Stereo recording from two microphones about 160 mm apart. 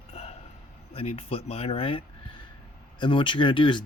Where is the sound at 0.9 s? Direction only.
35° left (ahead or behind).